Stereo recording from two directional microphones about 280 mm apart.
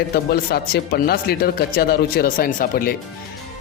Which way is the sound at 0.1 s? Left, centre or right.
Left.